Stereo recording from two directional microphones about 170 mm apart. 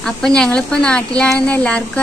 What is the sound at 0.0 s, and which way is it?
Speech, 5° left (ahead or behind).